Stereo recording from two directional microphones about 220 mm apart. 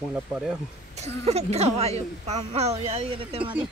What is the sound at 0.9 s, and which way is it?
A woman's voice, 30° right (ahead or behind).